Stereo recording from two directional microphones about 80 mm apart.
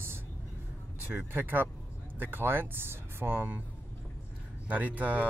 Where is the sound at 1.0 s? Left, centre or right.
Right.